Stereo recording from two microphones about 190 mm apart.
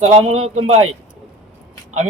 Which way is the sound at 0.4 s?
35° right (ahead or behind).